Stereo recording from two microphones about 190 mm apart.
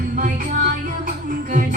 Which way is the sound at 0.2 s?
45° right (ahead or behind).